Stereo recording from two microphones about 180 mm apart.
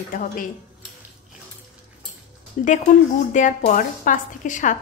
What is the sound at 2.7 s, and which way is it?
Speech, 45° left (ahead or behind).